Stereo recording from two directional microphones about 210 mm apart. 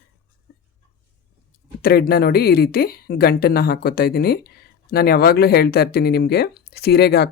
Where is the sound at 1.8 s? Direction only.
45° left (ahead or behind).